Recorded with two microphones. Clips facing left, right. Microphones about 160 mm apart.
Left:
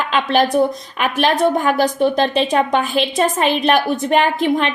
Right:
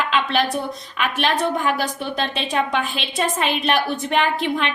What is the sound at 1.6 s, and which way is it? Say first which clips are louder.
A woman's voice: left 7 dB; 40° left (ahead or behind).